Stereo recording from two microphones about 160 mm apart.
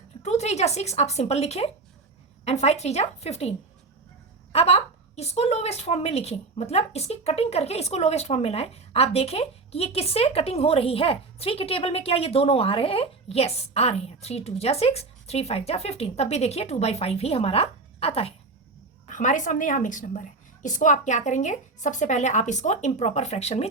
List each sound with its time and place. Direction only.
0.2 s a woman's voice: 45° left (ahead or behind)
4.5 s a woman's voice: 40° left (ahead or behind)
19.0 s a woman's voice: 50° left (ahead or behind)